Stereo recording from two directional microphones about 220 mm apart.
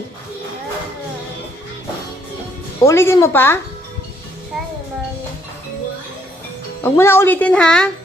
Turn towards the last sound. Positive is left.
turn(degrees=5)  # may be behind; listen again after turning